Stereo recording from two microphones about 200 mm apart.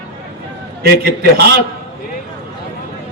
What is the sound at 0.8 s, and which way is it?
Speech, 50° right (ahead or behind).